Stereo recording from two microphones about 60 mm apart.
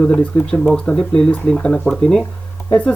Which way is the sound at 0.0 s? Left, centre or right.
Left.